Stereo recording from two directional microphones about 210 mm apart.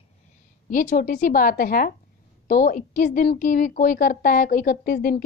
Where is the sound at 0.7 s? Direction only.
35° left (ahead or behind).